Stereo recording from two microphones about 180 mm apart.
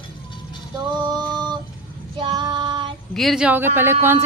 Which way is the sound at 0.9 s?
25° right (ahead or behind).